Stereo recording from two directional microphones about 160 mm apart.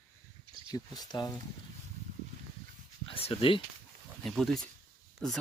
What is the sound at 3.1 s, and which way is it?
Speech, 35° left (ahead or behind).